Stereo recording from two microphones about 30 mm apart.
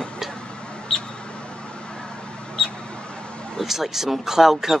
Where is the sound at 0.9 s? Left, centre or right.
Centre.